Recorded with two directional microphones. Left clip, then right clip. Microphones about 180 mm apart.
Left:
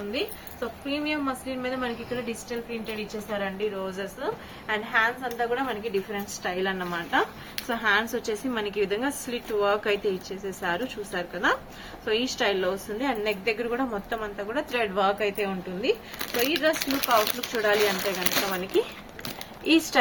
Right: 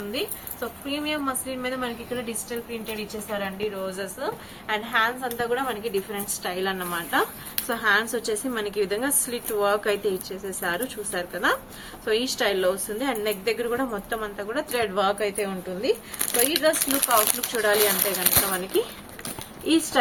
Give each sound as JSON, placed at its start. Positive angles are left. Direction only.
{"t": 0.1, "sound": "speech", "side_deg": 10}
{"t": 7.2, "sound": "speech", "side_deg": 20}
{"t": 16.5, "sound": "speech", "side_deg": 15}
{"t": 16.7, "sound": "speech", "side_deg": 25}
{"t": 19.6, "sound": "speech", "side_deg": 15}